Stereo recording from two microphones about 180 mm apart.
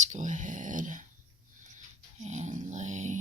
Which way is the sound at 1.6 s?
45° right (ahead or behind).